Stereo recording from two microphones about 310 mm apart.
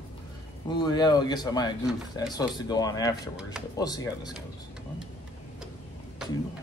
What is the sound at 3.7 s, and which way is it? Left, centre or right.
Speech, centre.